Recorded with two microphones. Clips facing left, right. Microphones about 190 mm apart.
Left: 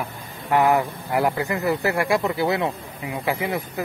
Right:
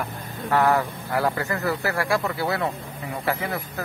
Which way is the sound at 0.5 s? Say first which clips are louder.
Left 2 dB; 15° left (ahead or behind).